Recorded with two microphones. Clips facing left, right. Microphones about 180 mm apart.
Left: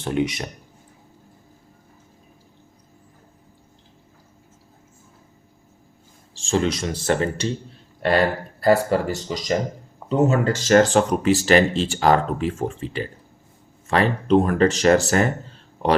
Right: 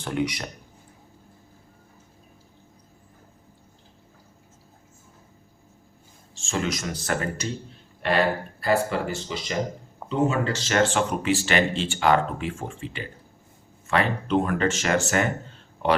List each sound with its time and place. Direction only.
0.0 s speech: 20° left (ahead or behind)
6.3 s speech: 35° left (ahead or behind)
8.6 s speech: 40° left (ahead or behind)